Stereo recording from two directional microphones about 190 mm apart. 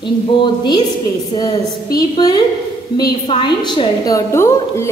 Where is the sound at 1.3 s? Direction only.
25° left (ahead or behind).